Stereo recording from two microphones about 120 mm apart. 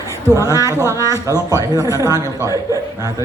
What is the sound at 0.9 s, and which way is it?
A man's voice, 30° right (ahead or behind).